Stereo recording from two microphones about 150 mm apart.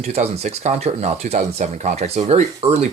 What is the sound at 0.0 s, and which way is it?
Speech, 45° right (ahead or behind).